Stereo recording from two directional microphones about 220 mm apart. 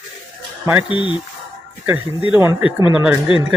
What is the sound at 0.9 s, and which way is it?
Speech, 20° left (ahead or behind).